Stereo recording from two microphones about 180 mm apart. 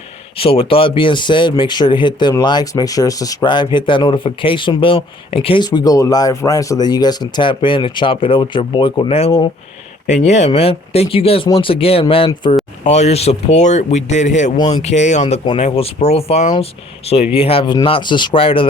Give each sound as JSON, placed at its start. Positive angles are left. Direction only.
{"t": 0.3, "sound": "speech", "side_deg": 30}